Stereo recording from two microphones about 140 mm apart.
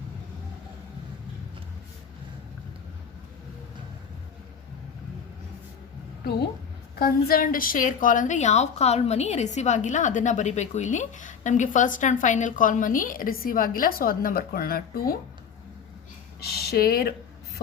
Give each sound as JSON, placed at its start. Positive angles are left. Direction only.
{"t": 7.0, "sound": "a woman's voice", "side_deg": 90}
{"t": 16.6, "sound": "speech", "side_deg": 90}